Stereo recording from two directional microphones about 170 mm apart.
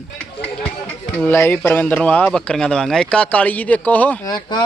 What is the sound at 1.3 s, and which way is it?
A man's voice, 15° left (ahead or behind).